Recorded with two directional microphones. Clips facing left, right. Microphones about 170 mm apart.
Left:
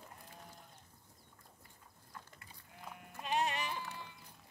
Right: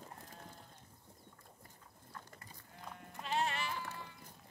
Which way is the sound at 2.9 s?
5° left (ahead or behind).